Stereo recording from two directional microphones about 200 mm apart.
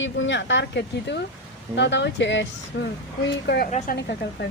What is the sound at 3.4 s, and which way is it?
A woman's voice, 50° left (ahead or behind).